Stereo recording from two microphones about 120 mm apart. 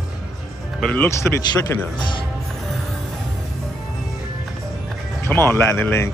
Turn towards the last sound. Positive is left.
turn(degrees=15)  # may be behind; listen again after turning